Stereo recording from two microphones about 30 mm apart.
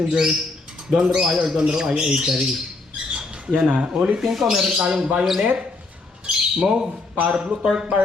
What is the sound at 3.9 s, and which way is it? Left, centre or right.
Speech, right.